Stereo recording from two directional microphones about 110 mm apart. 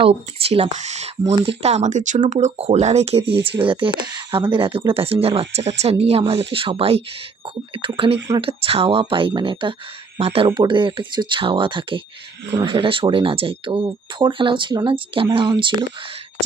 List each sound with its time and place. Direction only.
0.0 s speech: 60° right (ahead or behind); by 1.1 s 90° right
1.3 s speech: 75° right (ahead or behind)
3.6 s speech: 50° right (ahead or behind)
5.8 s a woman's voice: 75° right (ahead or behind)
7.4 s speech: 50° right (ahead or behind)
10.2 s a woman's voice: 65° right (ahead or behind); by 15.8 s 45° right (ahead or behind)